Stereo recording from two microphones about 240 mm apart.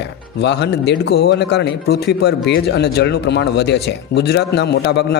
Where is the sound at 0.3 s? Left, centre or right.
Left.